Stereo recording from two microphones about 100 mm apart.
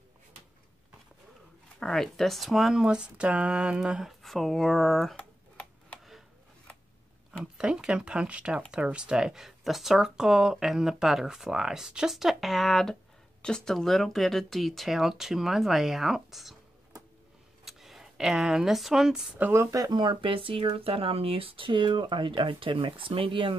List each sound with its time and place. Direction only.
1.8 s speech: 5° left (ahead or behind)
7.5 s speech: 10° right (ahead or behind)
17.6 s speech: centre (ahead or behind)
19.3 s speech: 20° right (ahead or behind); by 23.5 s 60° right (ahead or behind)